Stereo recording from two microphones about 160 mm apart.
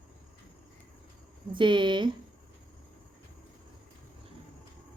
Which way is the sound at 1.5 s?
30° right (ahead or behind).